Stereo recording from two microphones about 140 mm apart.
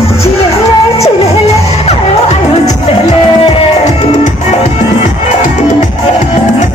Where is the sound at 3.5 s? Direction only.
55° left (ahead or behind).